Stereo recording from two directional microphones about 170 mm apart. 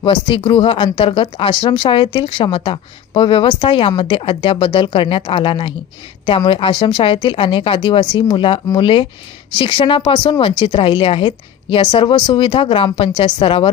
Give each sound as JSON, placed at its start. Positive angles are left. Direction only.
{"t": 0.0, "sound": "a woman's voice", "side_deg": 30}